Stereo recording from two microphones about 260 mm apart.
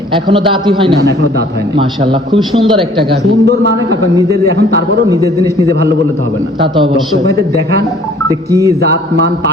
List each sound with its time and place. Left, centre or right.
0.3 s a man's voice: centre
3.4 s a man's voice: right
6.6 s a man's voice: centre
8.3 s speech: centre